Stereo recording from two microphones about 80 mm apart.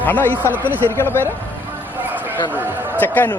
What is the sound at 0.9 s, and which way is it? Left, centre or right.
Speech, left.